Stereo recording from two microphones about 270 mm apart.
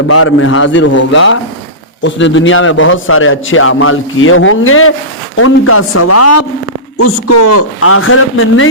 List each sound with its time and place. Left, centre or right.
0.1 s a man's voice: left